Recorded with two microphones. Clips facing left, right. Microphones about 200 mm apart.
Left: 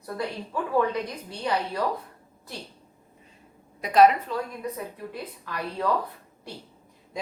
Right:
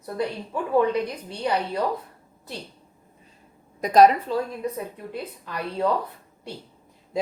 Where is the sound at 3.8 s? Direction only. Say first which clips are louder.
Right 2 dB; 40° right (ahead or behind).